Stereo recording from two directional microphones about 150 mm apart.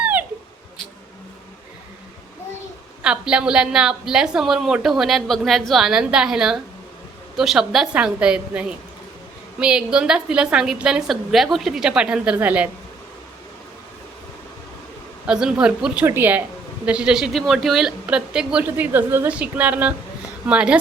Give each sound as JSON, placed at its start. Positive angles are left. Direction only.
{"t": 0.0, "sound": "a sound", "side_deg": -10}
{"t": 3.0, "sound": "a woman's voice", "side_deg": -5}
{"t": 15.3, "sound": "a woman's voice", "side_deg": -5}